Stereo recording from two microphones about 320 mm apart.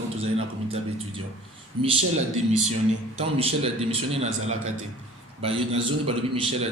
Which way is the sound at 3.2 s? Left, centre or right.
Centre.